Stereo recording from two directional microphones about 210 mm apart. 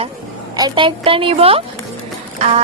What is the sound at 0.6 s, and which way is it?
A woman's voice, 20° right (ahead or behind).